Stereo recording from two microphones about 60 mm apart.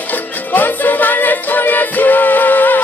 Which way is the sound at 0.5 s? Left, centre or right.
Left.